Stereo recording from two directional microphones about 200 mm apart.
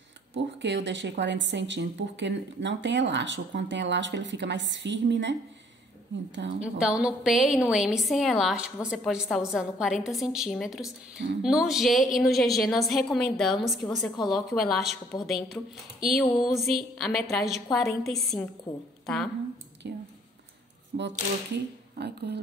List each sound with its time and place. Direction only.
0.6 s a woman's voice: 60° right (ahead or behind)
6.6 s a woman's voice: 5° right (ahead or behind)
19.8 s a woman's voice: 55° right (ahead or behind)